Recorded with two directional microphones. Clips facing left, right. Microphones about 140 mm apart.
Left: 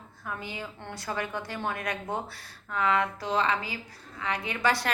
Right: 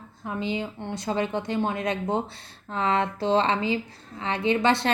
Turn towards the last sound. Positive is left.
turn(degrees=-25)  # may be behind; listen again after turning